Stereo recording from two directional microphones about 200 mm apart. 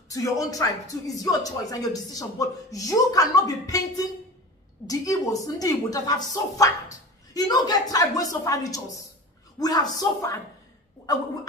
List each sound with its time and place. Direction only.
0.1 s speech: 15° left (ahead or behind)